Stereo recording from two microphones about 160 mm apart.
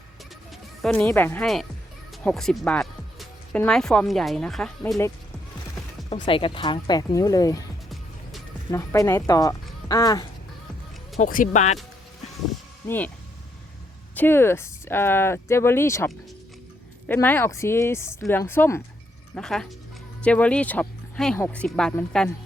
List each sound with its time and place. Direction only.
0.8 s speech: 5° left (ahead or behind)
2.2 s music: 5° left (ahead or behind)
3.7 s speech: 5° left (ahead or behind)
6.2 s speech: 30° left (ahead or behind)
8.7 s speech: 20° left (ahead or behind)
11.2 s speech: 55° left (ahead or behind)
14.2 s speech: 15° left (ahead or behind)